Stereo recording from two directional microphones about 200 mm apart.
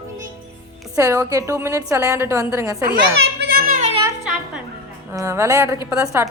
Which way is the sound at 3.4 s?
45° right (ahead or behind).